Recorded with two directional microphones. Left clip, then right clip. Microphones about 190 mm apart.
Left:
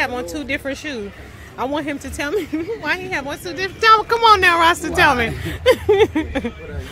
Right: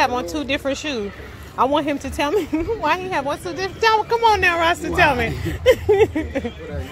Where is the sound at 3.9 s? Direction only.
30° left (ahead or behind).